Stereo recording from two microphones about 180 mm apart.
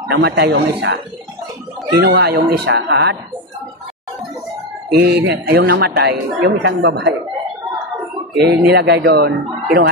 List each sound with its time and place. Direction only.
0.1 s a woman's voice: 70° right (ahead or behind)
4.9 s a woman's voice: 70° right (ahead or behind)
8.6 s speech: 65° right (ahead or behind)